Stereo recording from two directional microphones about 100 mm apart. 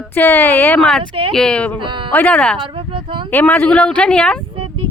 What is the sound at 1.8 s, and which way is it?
Speech, 55° right (ahead or behind).